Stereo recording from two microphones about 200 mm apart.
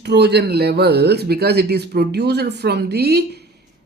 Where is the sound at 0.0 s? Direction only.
55° right (ahead or behind).